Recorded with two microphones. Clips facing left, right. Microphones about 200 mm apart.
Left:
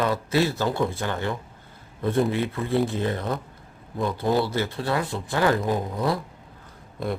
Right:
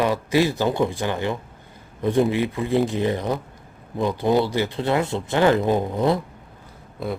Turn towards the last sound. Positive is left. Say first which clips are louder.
# right 1 dB
turn(degrees=0)  # may be behind; listen again after turning